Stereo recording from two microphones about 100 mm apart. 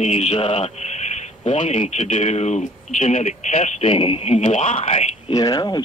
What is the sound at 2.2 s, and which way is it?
Speech, 90° left.